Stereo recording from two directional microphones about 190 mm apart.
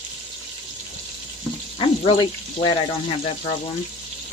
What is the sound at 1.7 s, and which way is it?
Speech, 25° left (ahead or behind).